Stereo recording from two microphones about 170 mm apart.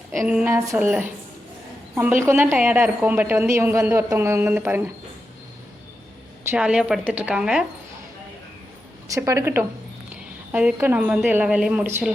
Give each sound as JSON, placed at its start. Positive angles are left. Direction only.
{"t": 0.2, "sound": "a woman's voice", "side_deg": -5}
{"t": 6.5, "sound": "a woman's voice", "side_deg": -5}
{"t": 9.1, "sound": "a woman's voice", "side_deg": -15}